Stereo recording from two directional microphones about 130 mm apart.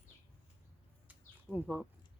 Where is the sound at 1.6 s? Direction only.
5° left (ahead or behind).